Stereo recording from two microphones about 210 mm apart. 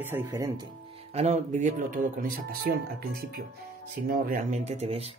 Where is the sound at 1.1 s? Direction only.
30° right (ahead or behind).